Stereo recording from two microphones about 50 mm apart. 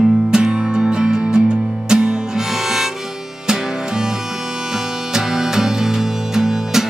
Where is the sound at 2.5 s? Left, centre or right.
Centre.